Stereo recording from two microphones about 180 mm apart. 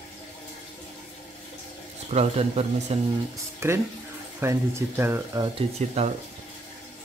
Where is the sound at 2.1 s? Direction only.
35° right (ahead or behind).